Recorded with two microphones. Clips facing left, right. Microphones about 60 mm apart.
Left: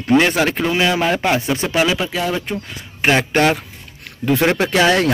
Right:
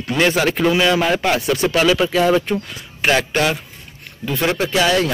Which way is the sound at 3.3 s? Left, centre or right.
Left.